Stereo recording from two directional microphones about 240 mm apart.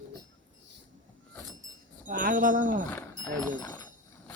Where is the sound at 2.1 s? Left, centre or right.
Right.